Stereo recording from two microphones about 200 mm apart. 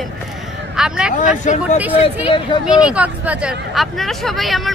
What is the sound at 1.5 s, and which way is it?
Speech, 40° left (ahead or behind).